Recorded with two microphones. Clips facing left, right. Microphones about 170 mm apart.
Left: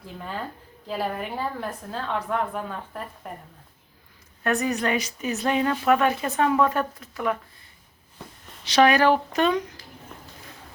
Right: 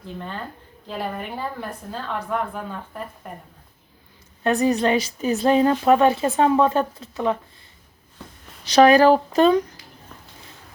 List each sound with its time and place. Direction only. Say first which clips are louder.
0.9 s a woman's voice: left 1 dB; centre (ahead or behind)
4.4 s a woman's voice: right 5 dB; 30° right (ahead or behind)
8.6 s speech: right 5 dB; 40° right (ahead or behind)